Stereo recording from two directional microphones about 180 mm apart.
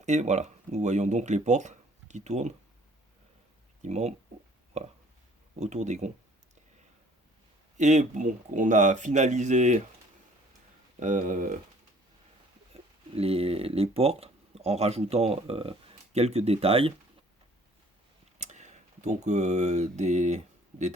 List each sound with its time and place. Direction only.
0.0 s speech: 40° right (ahead or behind)
3.8 s speech: 40° right (ahead or behind)
7.8 s speech: 40° right (ahead or behind)
11.0 s speech: 45° right (ahead or behind)
12.7 s speech: 35° right (ahead or behind)
18.3 s speech: 40° right (ahead or behind)